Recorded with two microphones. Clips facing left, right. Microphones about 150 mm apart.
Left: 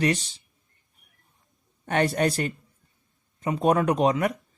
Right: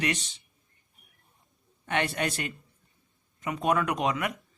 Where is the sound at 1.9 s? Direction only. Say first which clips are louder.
Left 6 dB; 40° left (ahead or behind).